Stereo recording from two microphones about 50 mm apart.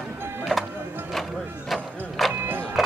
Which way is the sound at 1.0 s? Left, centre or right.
Centre.